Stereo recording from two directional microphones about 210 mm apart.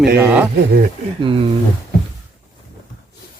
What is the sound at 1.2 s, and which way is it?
Speech, 25° right (ahead or behind).